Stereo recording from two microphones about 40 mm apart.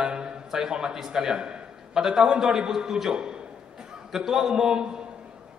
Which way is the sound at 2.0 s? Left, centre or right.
Centre.